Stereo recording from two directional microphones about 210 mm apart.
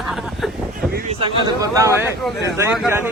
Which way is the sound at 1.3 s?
20° right (ahead or behind).